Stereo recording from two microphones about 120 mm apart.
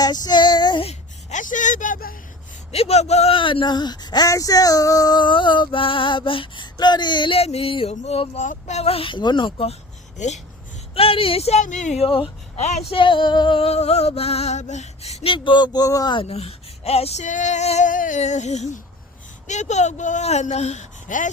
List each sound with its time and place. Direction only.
0.0 s female singing: 35° left (ahead or behind)
0.9 s speech: 90° left
2.7 s speech: 60° left (ahead or behind)
3.3 s a sound: 45° left (ahead or behind)
10.2 s female singing: 70° left (ahead or behind)
10.9 s speech: 50° left (ahead or behind); by 12.0 s 85° left
12.5 s speech: 70° left (ahead or behind)
12.9 s a sound: 45° left (ahead or behind)
16.2 s female singing: 55° left (ahead or behind); by 21.2 s 85° left